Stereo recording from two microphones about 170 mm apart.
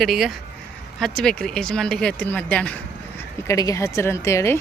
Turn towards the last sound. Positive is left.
turn(degrees=15)  # may be behind; listen again after turning